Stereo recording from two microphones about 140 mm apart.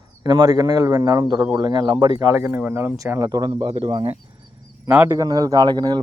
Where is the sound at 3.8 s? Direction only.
40° right (ahead or behind).